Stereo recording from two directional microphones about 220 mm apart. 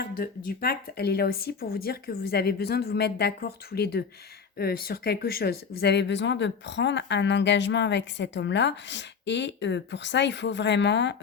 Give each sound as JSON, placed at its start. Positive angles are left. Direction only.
{"t": 0.0, "sound": "speech", "side_deg": 40}